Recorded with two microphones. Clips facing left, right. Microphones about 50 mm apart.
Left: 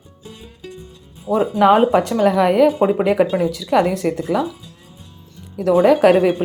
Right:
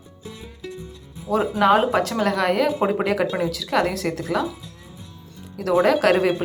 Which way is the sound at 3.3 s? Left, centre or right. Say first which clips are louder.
Left 5 dB; centre.